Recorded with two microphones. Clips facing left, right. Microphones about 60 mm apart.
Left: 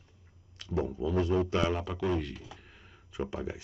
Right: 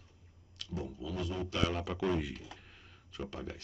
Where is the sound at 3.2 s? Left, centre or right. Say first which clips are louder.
Left 6 dB; centre.